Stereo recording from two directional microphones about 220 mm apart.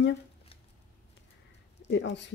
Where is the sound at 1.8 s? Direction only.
55° left (ahead or behind).